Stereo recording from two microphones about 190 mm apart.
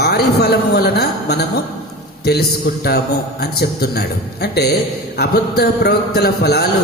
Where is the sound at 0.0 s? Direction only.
55° left (ahead or behind).